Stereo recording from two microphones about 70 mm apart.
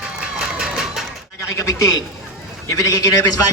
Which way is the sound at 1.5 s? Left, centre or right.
Left.